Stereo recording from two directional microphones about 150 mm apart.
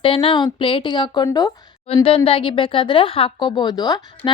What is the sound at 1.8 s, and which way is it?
A woman's voice, 40° left (ahead or behind).